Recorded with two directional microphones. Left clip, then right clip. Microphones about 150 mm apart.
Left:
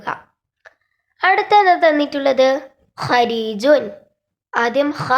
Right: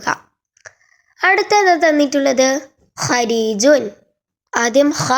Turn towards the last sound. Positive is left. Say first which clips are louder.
# right 3 dB
turn(degrees=-30)  # may be behind; listen again after turning